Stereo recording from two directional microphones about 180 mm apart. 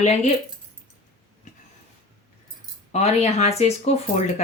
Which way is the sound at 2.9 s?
35° left (ahead or behind).